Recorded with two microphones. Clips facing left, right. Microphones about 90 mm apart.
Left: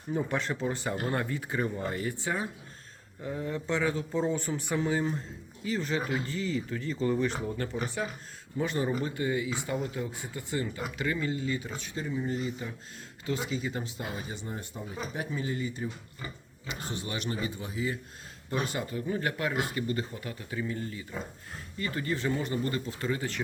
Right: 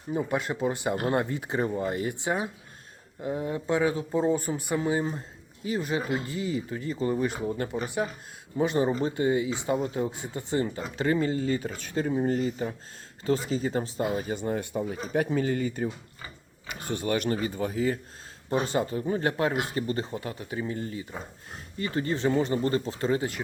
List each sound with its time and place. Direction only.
0.1 s speech: 10° right (ahead or behind); by 14.5 s 50° right (ahead or behind)
14.5 s speech: 70° right (ahead or behind); by 18.0 s 45° right (ahead or behind)
18.5 s speech: 30° right (ahead or behind)